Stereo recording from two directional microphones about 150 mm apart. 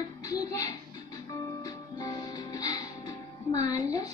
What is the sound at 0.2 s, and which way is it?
Music, 25° left (ahead or behind).